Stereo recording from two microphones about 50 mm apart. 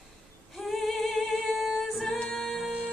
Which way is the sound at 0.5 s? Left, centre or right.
Centre.